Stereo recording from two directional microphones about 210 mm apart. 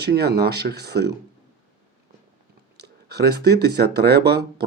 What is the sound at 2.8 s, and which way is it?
Speech, 50° right (ahead or behind).